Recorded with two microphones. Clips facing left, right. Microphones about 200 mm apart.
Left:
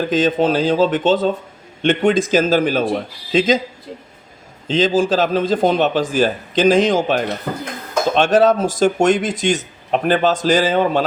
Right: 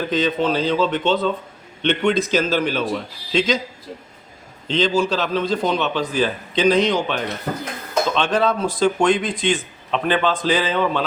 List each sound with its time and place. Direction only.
0.1 s a man's voice: 45° left (ahead or behind)
4.7 s a man's voice: 45° left (ahead or behind)